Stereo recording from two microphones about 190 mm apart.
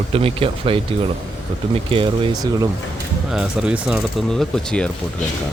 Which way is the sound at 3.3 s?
5° right (ahead or behind).